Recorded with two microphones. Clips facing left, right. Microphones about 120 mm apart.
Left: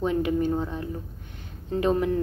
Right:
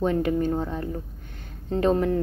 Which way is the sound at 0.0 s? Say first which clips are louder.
Right 1 dB; 40° right (ahead or behind).